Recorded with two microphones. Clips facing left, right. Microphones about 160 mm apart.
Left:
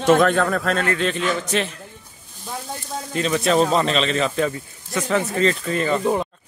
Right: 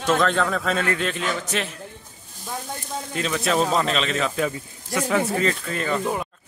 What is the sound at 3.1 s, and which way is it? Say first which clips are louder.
Speech: left 4 dB; centre (ahead or behind).